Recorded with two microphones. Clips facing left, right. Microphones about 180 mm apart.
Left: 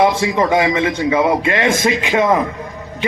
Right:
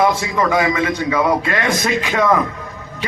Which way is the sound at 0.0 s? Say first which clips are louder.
Left 2 dB; 25° left (ahead or behind).